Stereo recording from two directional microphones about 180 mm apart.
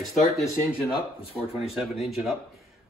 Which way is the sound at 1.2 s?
30° left (ahead or behind).